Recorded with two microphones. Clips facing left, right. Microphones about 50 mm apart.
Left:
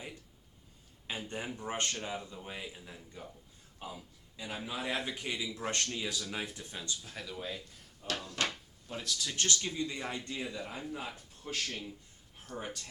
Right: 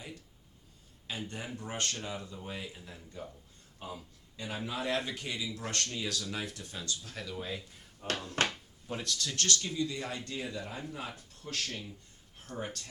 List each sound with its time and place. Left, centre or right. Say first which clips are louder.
1.0 s a man's voice: left 1 dB; centre
7.1 s speech: right 2 dB; centre
8.0 s speech: right 3 dB; right
9.0 s speech: even; centre
9.3 s a man's voice: right 1 dB; centre